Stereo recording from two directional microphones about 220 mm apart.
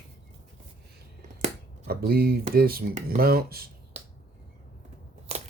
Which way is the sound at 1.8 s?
45° right (ahead or behind).